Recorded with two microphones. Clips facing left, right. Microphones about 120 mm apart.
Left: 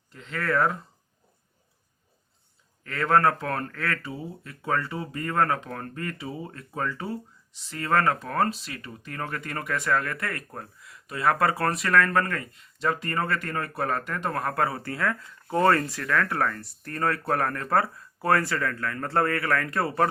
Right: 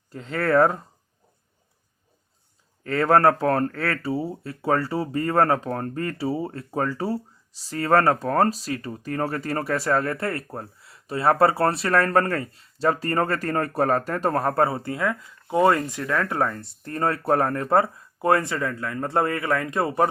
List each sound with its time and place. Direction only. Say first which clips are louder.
0.1 s speech: right 6 dB; 35° right (ahead or behind)
2.8 s speech: right 4 dB; 35° right (ahead or behind); by 20.1 s 20° right (ahead or behind)